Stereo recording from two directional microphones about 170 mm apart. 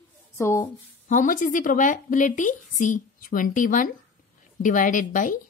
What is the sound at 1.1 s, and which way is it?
A woman's voice, 50° left (ahead or behind).